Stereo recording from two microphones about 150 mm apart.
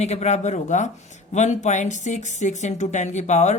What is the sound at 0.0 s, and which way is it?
Speech, 45° left (ahead or behind).